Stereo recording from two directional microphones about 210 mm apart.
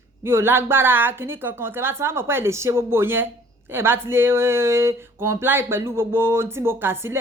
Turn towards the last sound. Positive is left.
turn(degrees=-10)  # may be behind; listen again after turning